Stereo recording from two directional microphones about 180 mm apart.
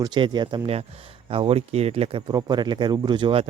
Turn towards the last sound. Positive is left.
turn(degrees=-30)  # may be behind; listen again after turning